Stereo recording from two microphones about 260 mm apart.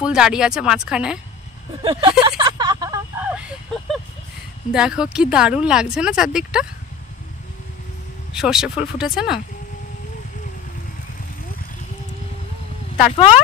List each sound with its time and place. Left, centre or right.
0.0 s speech: centre
1.8 s speech: right
2.2 s a sound: centre
4.7 s speech: centre
8.3 s speech: centre
12.9 s speech: left